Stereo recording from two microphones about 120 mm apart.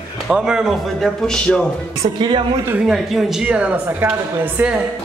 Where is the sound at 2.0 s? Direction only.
50° right (ahead or behind).